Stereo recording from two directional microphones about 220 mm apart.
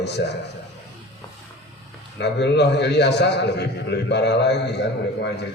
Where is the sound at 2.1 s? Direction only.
50° left (ahead or behind).